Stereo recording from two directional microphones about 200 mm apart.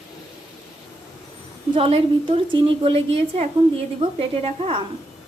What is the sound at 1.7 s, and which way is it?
A woman's voice, 25° right (ahead or behind).